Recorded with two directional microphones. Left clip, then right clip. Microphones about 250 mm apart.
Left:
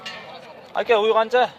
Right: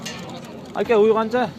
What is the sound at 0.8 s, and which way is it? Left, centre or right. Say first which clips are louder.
Speech: right 1 dB; centre.